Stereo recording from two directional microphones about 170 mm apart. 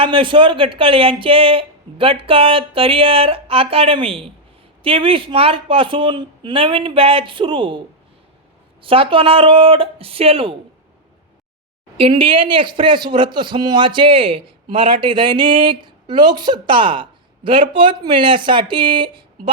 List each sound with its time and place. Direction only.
0.0 s speech: 30° right (ahead or behind)
8.8 s speech: 30° right (ahead or behind)
11.9 s a man's voice: 35° right (ahead or behind)